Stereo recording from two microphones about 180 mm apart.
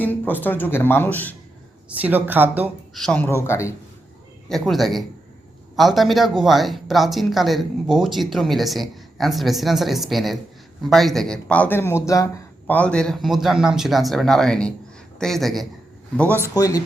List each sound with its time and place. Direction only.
0.0 s speech: 10° left (ahead or behind)
2.0 s speech: 10° right (ahead or behind)
2.9 s speech: 5° left (ahead or behind)
4.4 s speech: centre (ahead or behind)
16.6 s speech: 20° left (ahead or behind)